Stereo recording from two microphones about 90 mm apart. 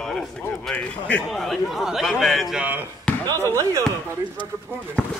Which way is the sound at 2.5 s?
20° right (ahead or behind).